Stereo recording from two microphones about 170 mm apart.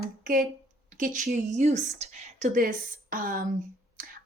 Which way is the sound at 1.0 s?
50° right (ahead or behind).